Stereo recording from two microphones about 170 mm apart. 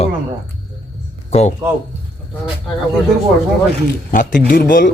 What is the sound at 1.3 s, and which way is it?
Speech, 40° left (ahead or behind).